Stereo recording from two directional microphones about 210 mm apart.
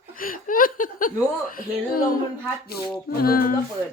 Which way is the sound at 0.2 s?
40° left (ahead or behind).